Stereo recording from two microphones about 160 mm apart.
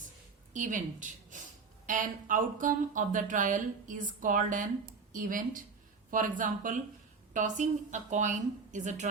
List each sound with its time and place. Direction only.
0.5 s speech: 50° right (ahead or behind)